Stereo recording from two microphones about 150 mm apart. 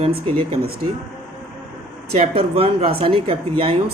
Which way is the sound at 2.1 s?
45° right (ahead or behind).